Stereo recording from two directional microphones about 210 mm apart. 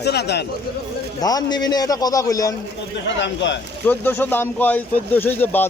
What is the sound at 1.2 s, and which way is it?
Speech, 20° left (ahead or behind).